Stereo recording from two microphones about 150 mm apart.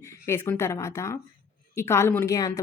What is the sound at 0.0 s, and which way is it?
A woman's voice, 15° left (ahead or behind).